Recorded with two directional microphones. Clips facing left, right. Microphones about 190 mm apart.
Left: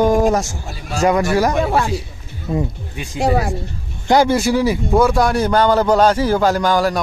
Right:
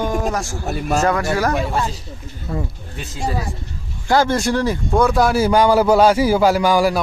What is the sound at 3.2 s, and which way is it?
Speech, 75° left (ahead or behind).